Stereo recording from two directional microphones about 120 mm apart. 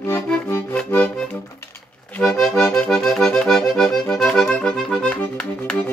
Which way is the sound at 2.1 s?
5° left (ahead or behind).